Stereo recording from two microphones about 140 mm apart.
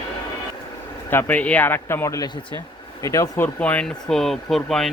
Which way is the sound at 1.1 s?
10° left (ahead or behind).